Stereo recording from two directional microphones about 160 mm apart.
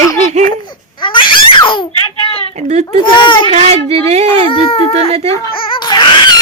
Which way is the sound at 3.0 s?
30° left (ahead or behind).